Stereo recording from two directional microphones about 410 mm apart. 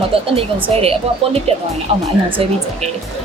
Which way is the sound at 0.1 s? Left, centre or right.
Centre.